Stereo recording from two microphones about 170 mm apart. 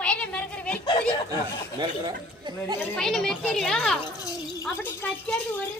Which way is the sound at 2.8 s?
5° left (ahead or behind).